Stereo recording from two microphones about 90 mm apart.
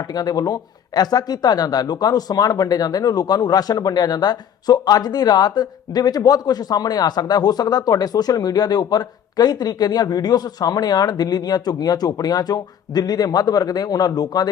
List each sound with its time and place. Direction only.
0.0 s speech: 45° left (ahead or behind)